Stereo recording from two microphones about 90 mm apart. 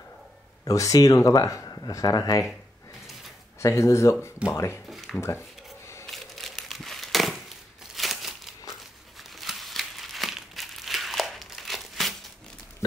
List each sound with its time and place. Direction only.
0.7 s speech: 40° left (ahead or behind)
3.5 s speech: 35° left (ahead or behind)
4.8 s a sound: centre (ahead or behind)
6.0 s crumpling: centre (ahead or behind)